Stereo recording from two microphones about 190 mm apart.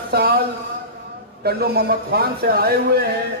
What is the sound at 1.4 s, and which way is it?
A man's voice, 55° right (ahead or behind).